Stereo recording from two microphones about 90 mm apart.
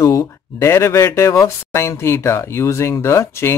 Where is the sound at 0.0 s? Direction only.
35° left (ahead or behind).